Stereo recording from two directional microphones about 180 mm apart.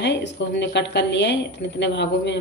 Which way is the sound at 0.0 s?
75° left (ahead or behind).